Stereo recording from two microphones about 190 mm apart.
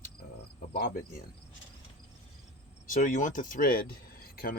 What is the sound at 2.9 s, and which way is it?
Speech, 45° left (ahead or behind).